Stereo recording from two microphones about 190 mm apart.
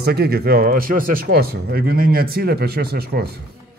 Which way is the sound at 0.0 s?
55° right (ahead or behind).